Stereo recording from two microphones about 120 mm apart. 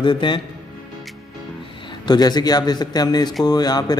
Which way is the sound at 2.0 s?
35° left (ahead or behind).